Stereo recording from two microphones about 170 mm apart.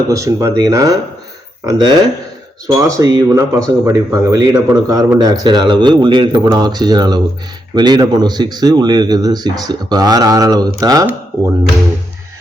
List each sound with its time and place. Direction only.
0.1 s speech: 20° right (ahead or behind)